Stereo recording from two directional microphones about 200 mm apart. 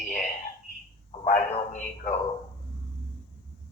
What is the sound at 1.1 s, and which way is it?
A man's voice, 35° left (ahead or behind).